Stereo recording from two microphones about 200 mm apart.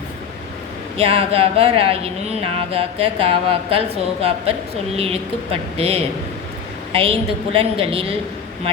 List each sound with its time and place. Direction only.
0.9 s speech: 30° right (ahead or behind)